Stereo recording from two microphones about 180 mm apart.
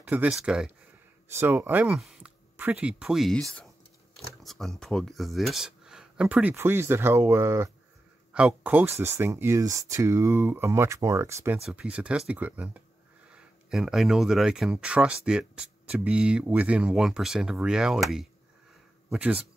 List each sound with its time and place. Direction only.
0.0 s speech: 10° right (ahead or behind)